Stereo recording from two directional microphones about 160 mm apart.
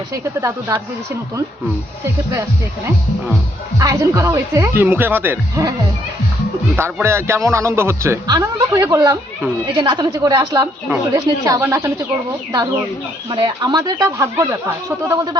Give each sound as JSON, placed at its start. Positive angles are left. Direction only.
{"t": 0.1, "sound": "speech", "side_deg": -20}
{"t": 3.8, "sound": "speech", "side_deg": -20}
{"t": 6.7, "sound": "speech", "side_deg": -15}
{"t": 13.3, "sound": "speech", "side_deg": -30}